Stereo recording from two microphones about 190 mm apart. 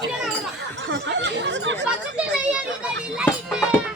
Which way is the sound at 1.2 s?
70° right (ahead or behind).